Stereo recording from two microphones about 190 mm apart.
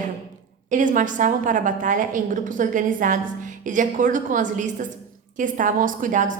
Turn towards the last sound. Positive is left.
turn(degrees=-45)  # may be behind; listen again after turning